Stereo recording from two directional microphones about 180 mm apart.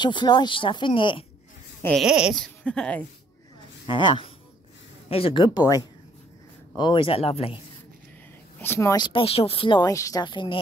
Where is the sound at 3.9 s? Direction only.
25° left (ahead or behind).